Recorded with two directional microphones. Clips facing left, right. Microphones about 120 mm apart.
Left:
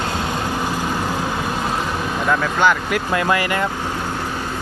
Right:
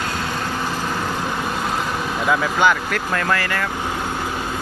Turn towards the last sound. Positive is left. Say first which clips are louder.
# left 3 dB
turn(degrees=20)  # may be behind; listen again after turning